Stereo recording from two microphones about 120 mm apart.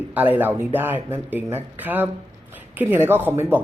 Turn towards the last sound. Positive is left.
turn(degrees=-15)  # may be behind; listen again after turning